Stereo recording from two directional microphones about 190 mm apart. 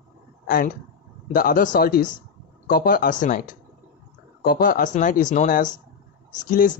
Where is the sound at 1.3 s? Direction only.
50° left (ahead or behind).